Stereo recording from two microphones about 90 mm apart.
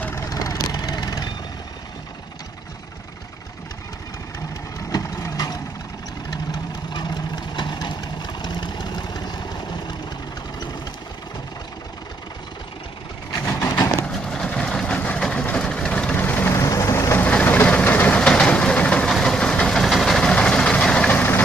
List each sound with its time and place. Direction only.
0.1 s vehicle: 40° left (ahead or behind)
4.9 s vehicle: 40° left (ahead or behind)
13.5 s vehicle: 30° left (ahead or behind)
14.3 s vehicle: 10° left (ahead or behind)
16.5 s vehicle: 35° left (ahead or behind)
17.3 s vehicle: 20° left (ahead or behind)